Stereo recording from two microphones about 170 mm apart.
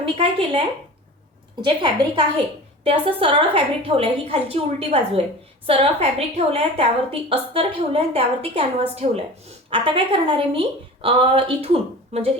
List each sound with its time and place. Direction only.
0.0 s a woman's voice: 30° right (ahead or behind)
1.6 s a woman's voice: 25° right (ahead or behind)